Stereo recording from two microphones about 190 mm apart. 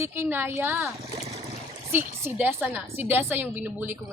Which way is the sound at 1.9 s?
10° right (ahead or behind).